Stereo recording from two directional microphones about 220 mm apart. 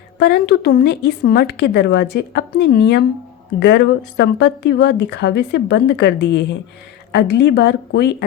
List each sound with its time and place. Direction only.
0.2 s speech: 50° left (ahead or behind)